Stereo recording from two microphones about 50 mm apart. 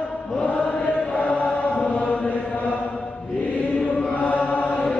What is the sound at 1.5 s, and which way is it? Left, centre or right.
Chant, centre.